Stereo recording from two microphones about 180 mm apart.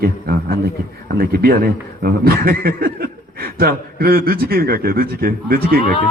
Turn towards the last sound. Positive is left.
turn(degrees=-55)  # may be behind; listen again after turning